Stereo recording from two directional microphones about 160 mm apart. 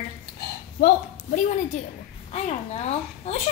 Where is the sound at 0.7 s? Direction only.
60° left (ahead or behind).